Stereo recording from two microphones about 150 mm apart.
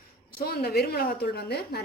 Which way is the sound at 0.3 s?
90° left.